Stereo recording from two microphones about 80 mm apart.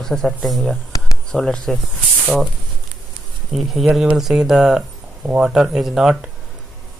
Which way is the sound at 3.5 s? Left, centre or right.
Centre.